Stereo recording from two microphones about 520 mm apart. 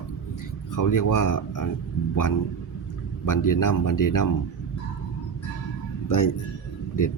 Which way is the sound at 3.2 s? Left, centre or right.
Left.